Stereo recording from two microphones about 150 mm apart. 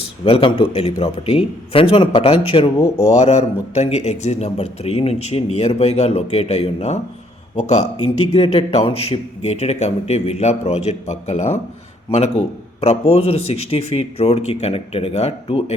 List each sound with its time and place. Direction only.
0.3 s a man's voice: 35° left (ahead or behind)
8.3 s speech: 45° left (ahead or behind)